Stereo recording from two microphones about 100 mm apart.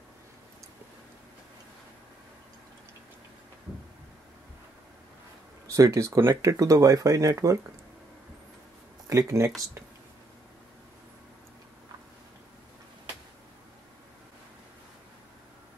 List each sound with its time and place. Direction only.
5.7 s speech: 30° right (ahead or behind)
9.1 s speech: 30° right (ahead or behind)